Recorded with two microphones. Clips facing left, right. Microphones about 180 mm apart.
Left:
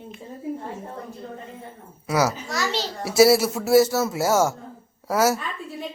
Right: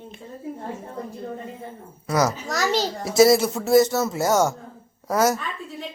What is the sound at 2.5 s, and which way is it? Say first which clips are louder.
Speech: right 3 dB; 45° right (ahead or behind).